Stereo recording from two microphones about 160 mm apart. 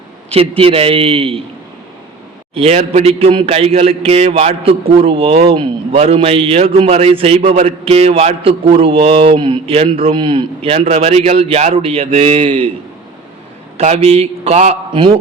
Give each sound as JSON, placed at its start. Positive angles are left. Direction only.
{"t": 0.3, "sound": "a man's voice", "side_deg": -35}
{"t": 2.6, "sound": "a man's voice", "side_deg": -40}
{"t": 13.7, "sound": "a man's voice", "side_deg": -40}